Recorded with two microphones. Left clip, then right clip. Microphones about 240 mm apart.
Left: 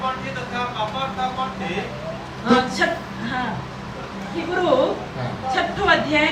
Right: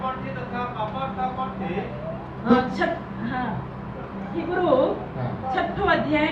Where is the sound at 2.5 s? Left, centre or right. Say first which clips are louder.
Left 3 dB; centre.